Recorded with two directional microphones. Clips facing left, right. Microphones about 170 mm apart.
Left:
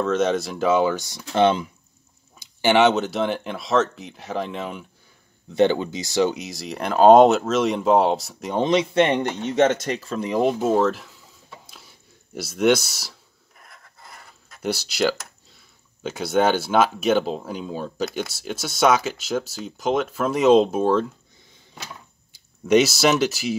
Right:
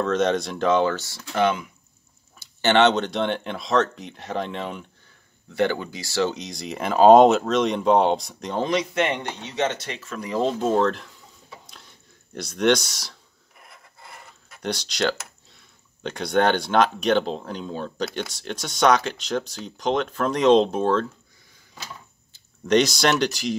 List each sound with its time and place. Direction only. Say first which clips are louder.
0.0 s speech: left 1 dB; centre (ahead or behind); by 1.7 s 30° left (ahead or behind)
2.3 s speech: left 1 dB; 15° left (ahead or behind)
5.5 s speech: left 5 dB; 20° left (ahead or behind); by 8.5 s 5° left (ahead or behind)
8.5 s speech: left 4 dB; 25° left (ahead or behind)
9.2 s speech: left 7 dB; 50° left (ahead or behind); by 11.1 s 5° left (ahead or behind)
11.6 s a sound: even; 5° left (ahead or behind)
12.4 s speech: left 2 dB; 5° left (ahead or behind)
13.6 s pant: right 1 dB; 5° right (ahead or behind)
14.6 s speech: left 3 dB; 5° left (ahead or behind)
22.3 s speech: left 2 dB; 5° left (ahead or behind)